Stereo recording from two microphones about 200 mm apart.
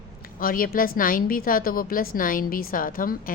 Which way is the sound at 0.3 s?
45° left (ahead or behind).